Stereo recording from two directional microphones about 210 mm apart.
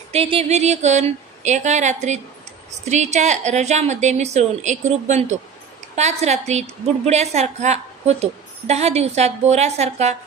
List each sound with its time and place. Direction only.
0.1 s a woman's voice: 30° right (ahead or behind)